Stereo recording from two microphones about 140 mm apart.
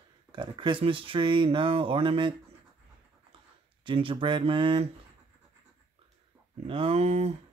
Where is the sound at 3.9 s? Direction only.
40° right (ahead or behind).